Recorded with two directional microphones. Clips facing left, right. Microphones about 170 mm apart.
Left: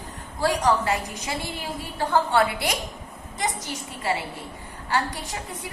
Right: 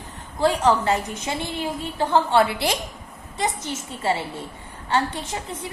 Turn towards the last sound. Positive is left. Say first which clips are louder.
# right 3 dB
turn(degrees=-25)  # may be behind; listen again after turning